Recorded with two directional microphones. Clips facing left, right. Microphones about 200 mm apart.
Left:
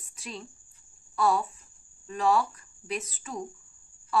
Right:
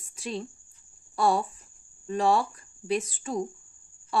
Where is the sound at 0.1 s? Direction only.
30° right (ahead or behind).